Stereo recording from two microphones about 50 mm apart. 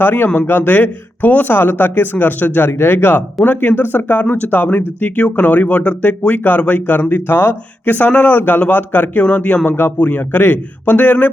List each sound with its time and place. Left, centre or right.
0.0 s speech: left
3.4 s speech: left
5.2 s speech: left